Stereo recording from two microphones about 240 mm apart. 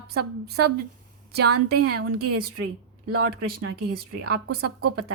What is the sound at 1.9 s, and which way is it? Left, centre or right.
A woman's voice, right.